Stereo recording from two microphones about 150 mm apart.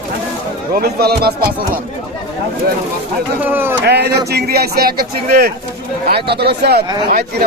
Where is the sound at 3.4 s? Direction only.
15° right (ahead or behind).